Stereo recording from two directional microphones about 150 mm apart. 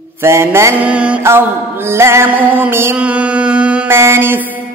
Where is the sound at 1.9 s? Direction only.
15° right (ahead or behind).